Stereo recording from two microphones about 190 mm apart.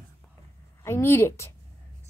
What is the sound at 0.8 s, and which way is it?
Speech, 15° left (ahead or behind).